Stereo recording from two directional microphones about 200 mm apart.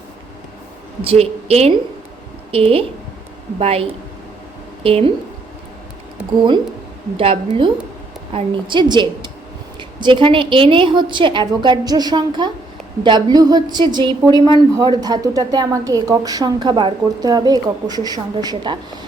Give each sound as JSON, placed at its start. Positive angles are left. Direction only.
{"t": 1.0, "sound": "a woman's voice", "side_deg": -30}
{"t": 7.2, "sound": "a woman's voice", "side_deg": -25}